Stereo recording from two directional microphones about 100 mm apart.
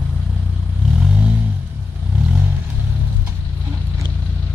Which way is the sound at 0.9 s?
10° right (ahead or behind).